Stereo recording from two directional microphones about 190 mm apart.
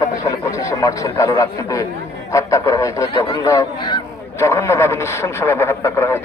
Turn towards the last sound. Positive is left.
turn(degrees=15)  # may be behind; listen again after turning